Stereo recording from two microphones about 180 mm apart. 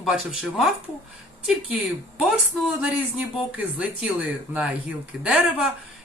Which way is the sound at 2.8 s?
10° right (ahead or behind).